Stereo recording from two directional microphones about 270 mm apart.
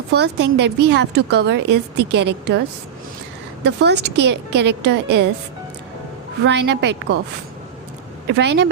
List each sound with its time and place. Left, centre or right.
0.1 s a woman's voice: right
3.6 s a woman's voice: right
6.4 s a woman's voice: right
8.3 s a woman's voice: right